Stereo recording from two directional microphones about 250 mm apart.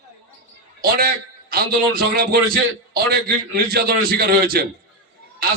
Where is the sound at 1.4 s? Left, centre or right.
Right.